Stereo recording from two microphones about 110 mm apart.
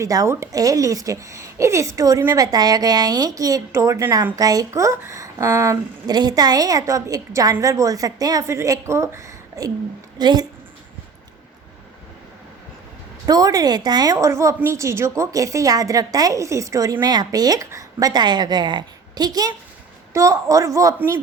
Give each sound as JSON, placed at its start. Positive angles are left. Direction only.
{"t": 0.0, "sound": "a woman's voice", "side_deg": -30}
{"t": 6.1, "sound": "speech", "side_deg": -40}
{"t": 10.2, "sound": "speech", "side_deg": -40}
{"t": 13.2, "sound": "a woman's voice", "side_deg": -35}